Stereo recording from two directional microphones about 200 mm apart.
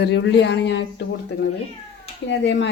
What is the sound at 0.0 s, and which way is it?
A woman's voice, 60° left (ahead or behind).